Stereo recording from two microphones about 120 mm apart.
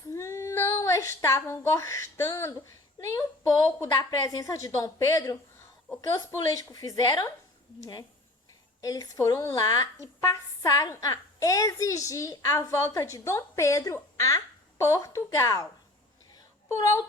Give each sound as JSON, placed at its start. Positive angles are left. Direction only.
{"t": 0.1, "sound": "speech", "side_deg": 25}
{"t": 16.6, "sound": "speech", "side_deg": 25}